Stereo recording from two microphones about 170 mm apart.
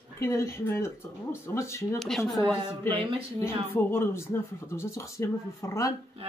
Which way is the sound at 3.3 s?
15° left (ahead or behind).